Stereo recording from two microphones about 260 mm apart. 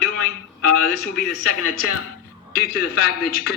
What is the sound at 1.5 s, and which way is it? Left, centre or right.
Speech, left.